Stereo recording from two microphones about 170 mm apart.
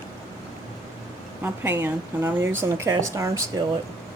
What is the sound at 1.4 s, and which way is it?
Speech, 15° right (ahead or behind).